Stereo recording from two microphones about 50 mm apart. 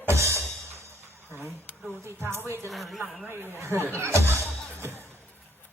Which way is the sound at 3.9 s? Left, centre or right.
Right.